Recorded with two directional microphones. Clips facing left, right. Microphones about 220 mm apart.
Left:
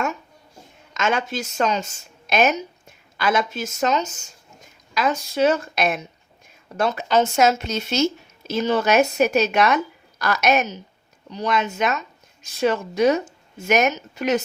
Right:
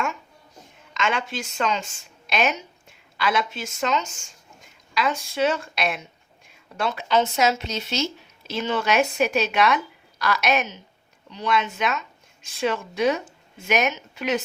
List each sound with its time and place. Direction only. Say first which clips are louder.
0.9 s speech: left 3 dB; 45° left (ahead or behind)